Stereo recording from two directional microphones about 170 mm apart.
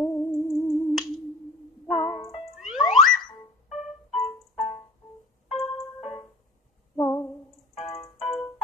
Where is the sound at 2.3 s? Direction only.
Centre (ahead or behind).